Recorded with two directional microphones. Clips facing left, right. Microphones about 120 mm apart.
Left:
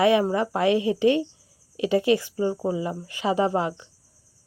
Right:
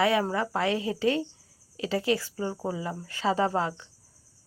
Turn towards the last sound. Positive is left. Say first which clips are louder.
# left 3 dB
turn(degrees=15)  # may be behind; listen again after turning